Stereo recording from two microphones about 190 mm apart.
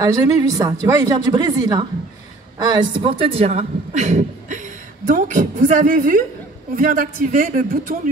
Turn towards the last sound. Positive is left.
turn(degrees=-50)  # may be behind; listen again after turning